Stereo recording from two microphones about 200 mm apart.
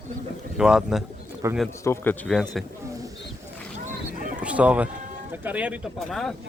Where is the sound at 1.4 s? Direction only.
15° right (ahead or behind).